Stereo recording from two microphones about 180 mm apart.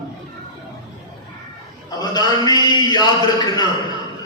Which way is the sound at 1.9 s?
20° left (ahead or behind).